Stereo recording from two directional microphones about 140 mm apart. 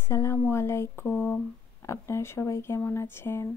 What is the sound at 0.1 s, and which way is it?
Speech, 20° left (ahead or behind).